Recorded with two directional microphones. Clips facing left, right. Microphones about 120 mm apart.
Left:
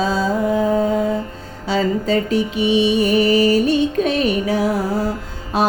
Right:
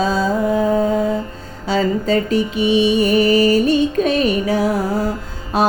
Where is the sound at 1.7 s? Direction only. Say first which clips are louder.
Right 1 dB; 45° right (ahead or behind).